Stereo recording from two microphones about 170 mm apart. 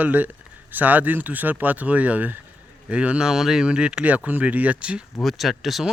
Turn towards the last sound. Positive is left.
turn(degrees=0)  # may be behind; listen again after turning